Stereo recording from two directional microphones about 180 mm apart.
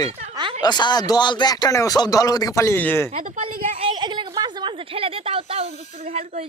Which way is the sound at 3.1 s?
45° right (ahead or behind).